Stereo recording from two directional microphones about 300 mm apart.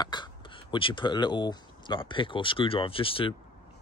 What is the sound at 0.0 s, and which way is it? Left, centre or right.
Speech, centre.